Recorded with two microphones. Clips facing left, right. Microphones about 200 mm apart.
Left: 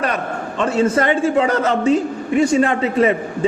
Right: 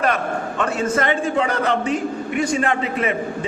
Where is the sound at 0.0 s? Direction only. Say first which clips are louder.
Right 1 dB; 30° left (ahead or behind).